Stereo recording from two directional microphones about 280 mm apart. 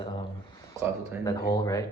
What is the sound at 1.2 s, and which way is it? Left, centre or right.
Speech, centre.